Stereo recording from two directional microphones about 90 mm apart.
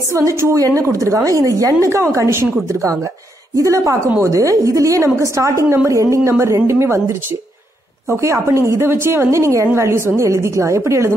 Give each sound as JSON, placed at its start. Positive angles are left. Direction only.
{"t": 0.1, "sound": "a woman's voice", "side_deg": -35}